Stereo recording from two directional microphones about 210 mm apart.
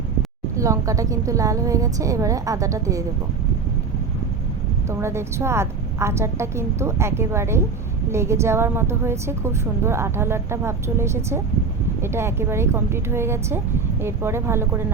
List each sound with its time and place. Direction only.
0.5 s a woman's voice: 15° right (ahead or behind)
4.9 s a woman's voice: 15° right (ahead or behind)